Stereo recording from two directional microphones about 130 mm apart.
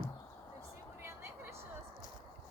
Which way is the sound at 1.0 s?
20° right (ahead or behind).